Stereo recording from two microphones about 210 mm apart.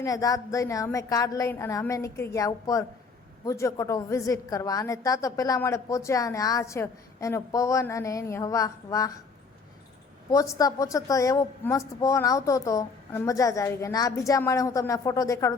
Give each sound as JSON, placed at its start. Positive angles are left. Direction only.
{"t": 0.0, "sound": "a woman's voice", "side_deg": 15}
{"t": 10.3, "sound": "a woman's voice", "side_deg": 15}